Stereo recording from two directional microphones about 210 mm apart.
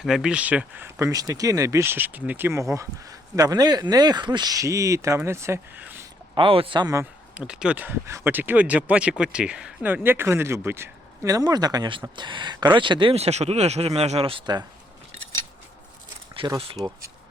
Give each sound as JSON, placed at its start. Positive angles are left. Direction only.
{"t": 0.0, "sound": "speech", "side_deg": -5}
{"t": 6.3, "sound": "speech", "side_deg": -25}
{"t": 16.3, "sound": "speech", "side_deg": -25}